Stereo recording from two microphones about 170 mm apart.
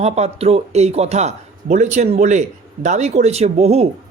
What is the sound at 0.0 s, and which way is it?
A man's voice, 40° right (ahead or behind).